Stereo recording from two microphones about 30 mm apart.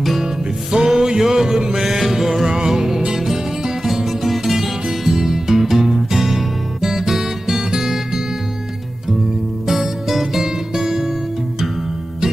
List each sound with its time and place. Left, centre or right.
0.2 s music: centre
3.2 s music: centre
9.7 s music: centre